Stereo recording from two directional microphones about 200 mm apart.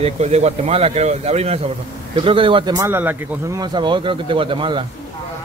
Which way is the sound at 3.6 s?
20° right (ahead or behind).